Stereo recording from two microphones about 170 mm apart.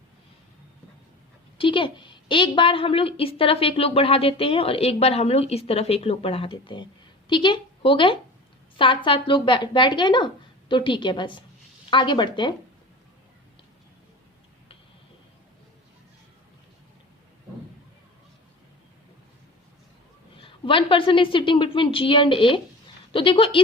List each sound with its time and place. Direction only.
1.5 s a woman's voice: 30° left (ahead or behind)
20.3 s a woman's voice: 30° left (ahead or behind)